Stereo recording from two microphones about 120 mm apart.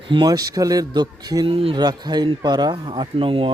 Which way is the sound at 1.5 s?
50° right (ahead or behind).